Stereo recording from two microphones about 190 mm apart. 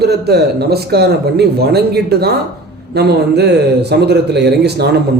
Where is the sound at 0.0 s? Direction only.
60° right (ahead or behind).